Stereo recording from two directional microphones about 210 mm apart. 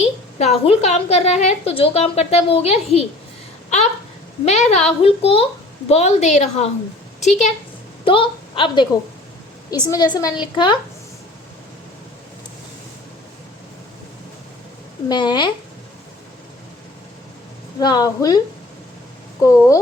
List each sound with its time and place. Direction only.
0.3 s a woman's voice: 30° left (ahead or behind)
4.4 s a woman's voice: 30° left (ahead or behind)
15.1 s a woman's voice: 20° left (ahead or behind)
17.7 s a woman's voice: 20° left (ahead or behind)
19.4 s a woman's voice: 15° left (ahead or behind)